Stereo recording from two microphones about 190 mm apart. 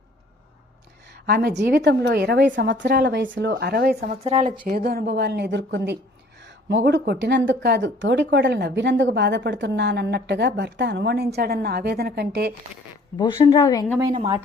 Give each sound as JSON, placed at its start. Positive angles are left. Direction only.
{"t": 1.3, "sound": "a woman's voice", "side_deg": -55}
{"t": 4.1, "sound": "speech", "side_deg": -35}
{"t": 4.7, "sound": "a woman's voice", "side_deg": -50}
{"t": 13.1, "sound": "a woman's voice", "side_deg": 20}